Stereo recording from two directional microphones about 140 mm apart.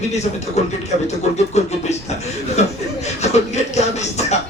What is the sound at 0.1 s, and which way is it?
Speech, 55° left (ahead or behind).